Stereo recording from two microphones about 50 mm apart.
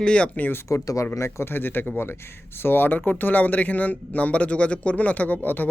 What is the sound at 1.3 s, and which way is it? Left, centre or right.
Speech, left.